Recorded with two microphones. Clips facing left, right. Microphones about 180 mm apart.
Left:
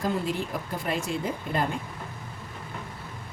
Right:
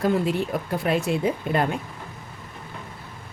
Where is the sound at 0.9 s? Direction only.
65° right (ahead or behind).